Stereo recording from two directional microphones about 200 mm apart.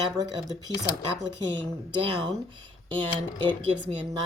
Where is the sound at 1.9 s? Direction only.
25° right (ahead or behind).